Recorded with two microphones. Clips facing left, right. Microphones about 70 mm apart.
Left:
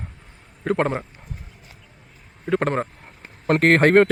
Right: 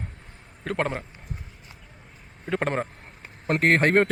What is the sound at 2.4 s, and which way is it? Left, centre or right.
Speech, centre.